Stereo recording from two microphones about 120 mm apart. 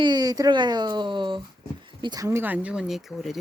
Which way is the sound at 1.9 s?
40° right (ahead or behind).